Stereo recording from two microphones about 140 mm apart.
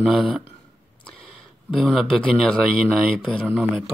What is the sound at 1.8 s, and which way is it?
Speech, centre (ahead or behind).